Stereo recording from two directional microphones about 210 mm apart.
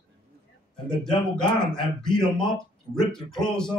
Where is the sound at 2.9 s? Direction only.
5° left (ahead or behind).